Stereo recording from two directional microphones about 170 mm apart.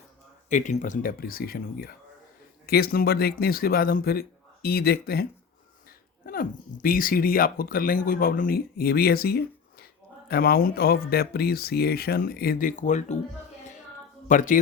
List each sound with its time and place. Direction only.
0.5 s speech: 45° left (ahead or behind); by 5.2 s 65° left (ahead or behind)
6.2 s speech: 55° left (ahead or behind)
14.3 s speech: 50° left (ahead or behind)